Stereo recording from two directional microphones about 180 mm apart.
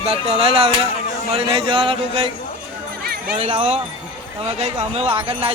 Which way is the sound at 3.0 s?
60° right (ahead or behind).